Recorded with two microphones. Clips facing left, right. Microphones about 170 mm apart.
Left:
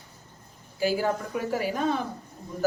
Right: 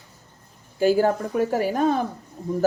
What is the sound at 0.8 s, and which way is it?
Speech, 45° right (ahead or behind).